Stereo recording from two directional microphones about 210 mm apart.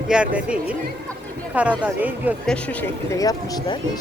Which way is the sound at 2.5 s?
10° left (ahead or behind).